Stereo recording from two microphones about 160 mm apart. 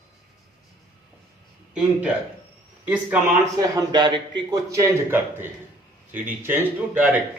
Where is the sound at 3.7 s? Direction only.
25° right (ahead or behind); by 7.2 s 10° right (ahead or behind).